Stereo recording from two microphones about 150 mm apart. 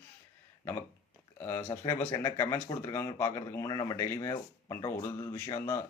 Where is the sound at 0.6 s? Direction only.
15° left (ahead or behind).